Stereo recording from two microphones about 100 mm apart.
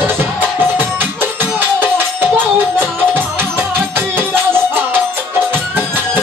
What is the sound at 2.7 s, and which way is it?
Music, 20° right (ahead or behind).